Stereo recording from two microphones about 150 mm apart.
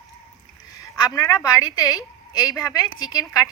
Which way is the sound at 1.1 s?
25° left (ahead or behind).